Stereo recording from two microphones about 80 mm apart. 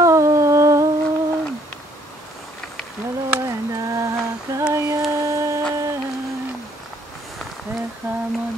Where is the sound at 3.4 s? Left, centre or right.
Right.